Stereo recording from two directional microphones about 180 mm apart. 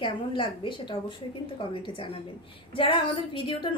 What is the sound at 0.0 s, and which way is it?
A woman's voice, 25° left (ahead or behind).